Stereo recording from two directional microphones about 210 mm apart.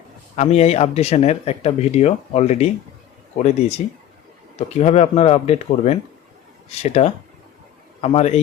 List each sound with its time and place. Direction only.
0.3 s speech: 30° left (ahead or behind)